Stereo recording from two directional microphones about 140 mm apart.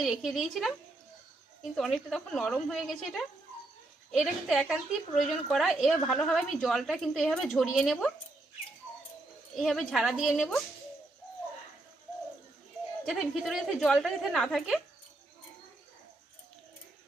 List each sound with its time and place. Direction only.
0.0 s a woman's voice: centre (ahead or behind)
9.6 s a woman's voice: centre (ahead or behind)
13.1 s a woman's voice: centre (ahead or behind)